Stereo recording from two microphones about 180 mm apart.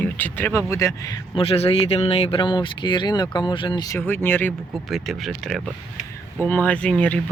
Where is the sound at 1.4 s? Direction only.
35° left (ahead or behind); by 4.5 s 10° left (ahead or behind).